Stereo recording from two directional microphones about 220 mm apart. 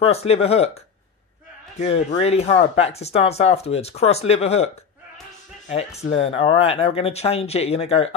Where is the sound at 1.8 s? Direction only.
30° left (ahead or behind).